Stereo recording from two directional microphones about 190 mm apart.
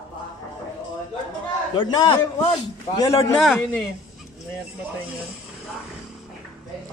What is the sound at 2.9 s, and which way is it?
Speech, 20° left (ahead or behind).